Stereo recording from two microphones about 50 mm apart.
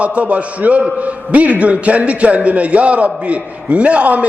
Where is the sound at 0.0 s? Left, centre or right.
Right.